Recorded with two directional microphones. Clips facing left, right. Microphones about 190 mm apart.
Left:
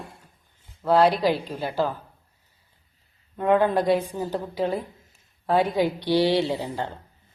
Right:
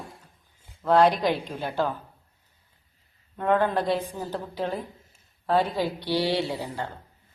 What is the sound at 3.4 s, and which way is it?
A woman's voice, 10° left (ahead or behind).